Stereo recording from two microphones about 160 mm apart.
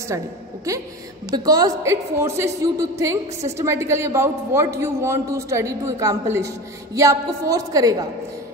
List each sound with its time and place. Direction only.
0.7 s a man's voice: 20° right (ahead or behind)